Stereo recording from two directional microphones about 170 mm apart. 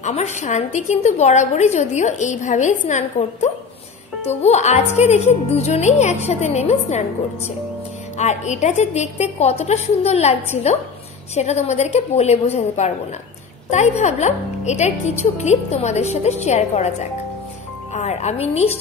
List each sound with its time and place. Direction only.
0.0 s a woman's voice: 40° left (ahead or behind)